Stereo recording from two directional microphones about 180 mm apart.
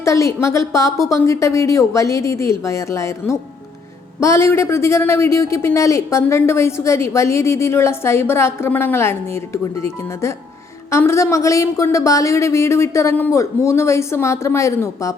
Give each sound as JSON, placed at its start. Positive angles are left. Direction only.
{"t": 0.0, "sound": "speech", "side_deg": 15}